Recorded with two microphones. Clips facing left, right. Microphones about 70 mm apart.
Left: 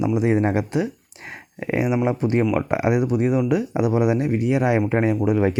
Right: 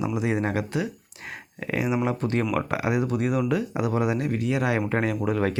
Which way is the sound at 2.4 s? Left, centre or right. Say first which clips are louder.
Left 5 dB; centre.